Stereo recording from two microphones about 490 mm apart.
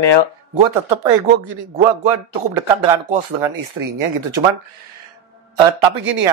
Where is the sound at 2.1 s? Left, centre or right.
Right.